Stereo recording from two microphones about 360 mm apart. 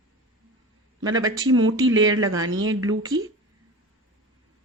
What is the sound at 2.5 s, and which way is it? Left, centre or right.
Speech, right.